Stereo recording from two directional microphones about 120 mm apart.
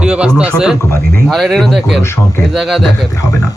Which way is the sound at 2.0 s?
20° left (ahead or behind).